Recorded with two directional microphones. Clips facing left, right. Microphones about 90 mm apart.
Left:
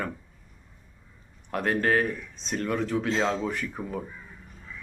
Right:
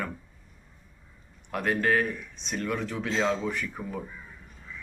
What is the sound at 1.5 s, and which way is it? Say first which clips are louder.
Speech: left 1 dB; 35° left (ahead or behind).